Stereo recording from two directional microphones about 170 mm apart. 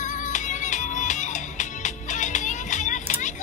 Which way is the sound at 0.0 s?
45° left (ahead or behind).